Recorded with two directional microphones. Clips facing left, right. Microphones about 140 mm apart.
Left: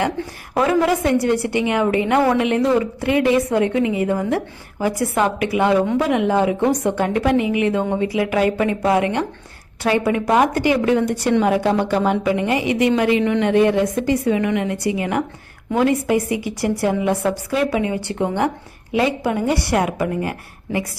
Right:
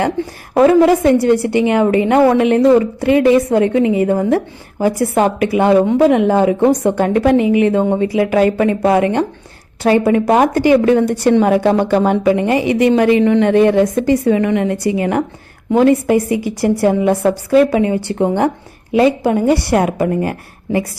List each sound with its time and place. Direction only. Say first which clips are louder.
0.5 s a woman's voice: right 8 dB; 35° right (ahead or behind)